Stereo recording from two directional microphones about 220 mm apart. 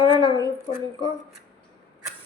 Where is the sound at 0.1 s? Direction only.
20° right (ahead or behind).